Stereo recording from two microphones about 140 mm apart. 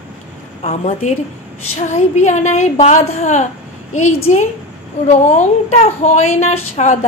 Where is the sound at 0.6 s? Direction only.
55° left (ahead or behind).